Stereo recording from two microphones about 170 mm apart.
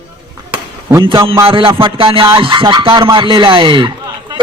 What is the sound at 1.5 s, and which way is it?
Music, 30° right (ahead or behind).